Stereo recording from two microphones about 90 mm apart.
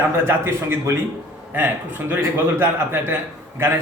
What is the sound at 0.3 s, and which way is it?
Mantra, 25° right (ahead or behind).